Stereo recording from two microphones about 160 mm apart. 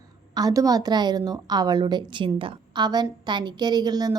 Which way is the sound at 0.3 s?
25° right (ahead or behind).